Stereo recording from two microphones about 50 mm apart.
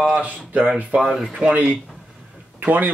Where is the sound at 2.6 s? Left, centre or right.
Right.